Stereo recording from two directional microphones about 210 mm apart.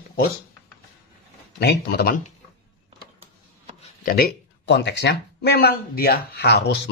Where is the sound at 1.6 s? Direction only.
45° left (ahead or behind).